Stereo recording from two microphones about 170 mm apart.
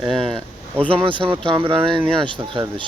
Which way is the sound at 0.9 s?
30° right (ahead or behind).